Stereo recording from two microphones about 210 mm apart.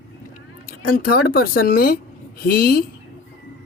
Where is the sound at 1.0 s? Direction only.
45° left (ahead or behind).